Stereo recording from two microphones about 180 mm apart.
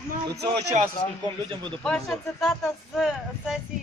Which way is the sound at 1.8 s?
5° left (ahead or behind).